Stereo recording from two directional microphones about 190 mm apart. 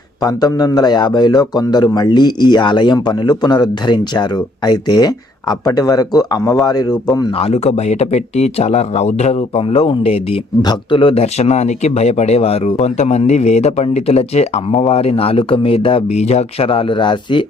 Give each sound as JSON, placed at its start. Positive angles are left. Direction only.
{"t": 0.2, "sound": "a man's voice", "side_deg": 20}